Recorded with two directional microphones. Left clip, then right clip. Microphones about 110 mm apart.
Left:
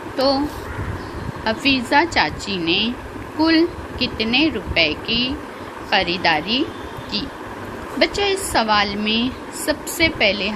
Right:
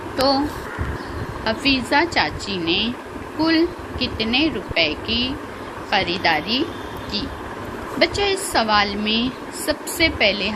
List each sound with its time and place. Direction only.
0.2 s speech: 25° left (ahead or behind)
1.5 s a woman's voice: 35° left (ahead or behind)
7.9 s a woman's voice: 30° left (ahead or behind)